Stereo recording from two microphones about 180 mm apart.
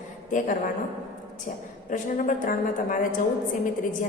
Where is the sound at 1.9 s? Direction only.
45° left (ahead or behind).